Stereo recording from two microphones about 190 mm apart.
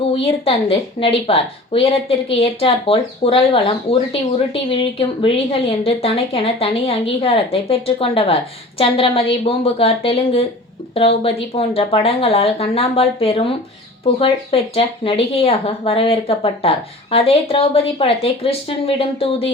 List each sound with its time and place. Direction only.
0.0 s a woman's voice: 30° left (ahead or behind)